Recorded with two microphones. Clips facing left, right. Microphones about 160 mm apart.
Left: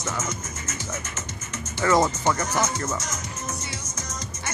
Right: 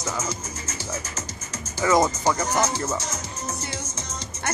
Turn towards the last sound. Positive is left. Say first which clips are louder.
# right 2 dB
turn(degrees=-30)  # may be behind; listen again after turning